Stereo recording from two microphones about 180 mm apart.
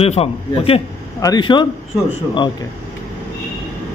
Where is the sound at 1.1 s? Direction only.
20° left (ahead or behind).